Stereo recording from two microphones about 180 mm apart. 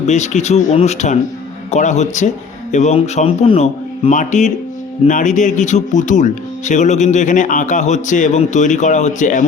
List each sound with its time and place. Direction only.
0.0 s speech: 40° left (ahead or behind)